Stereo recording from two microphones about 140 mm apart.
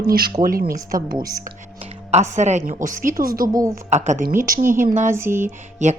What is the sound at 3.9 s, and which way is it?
Speech, 60° right (ahead or behind).